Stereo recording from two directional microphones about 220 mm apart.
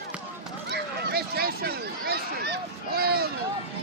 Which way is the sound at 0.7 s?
45° right (ahead or behind).